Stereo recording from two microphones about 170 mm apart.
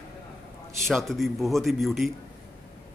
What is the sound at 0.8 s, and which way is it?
A man's voice, centre (ahead or behind).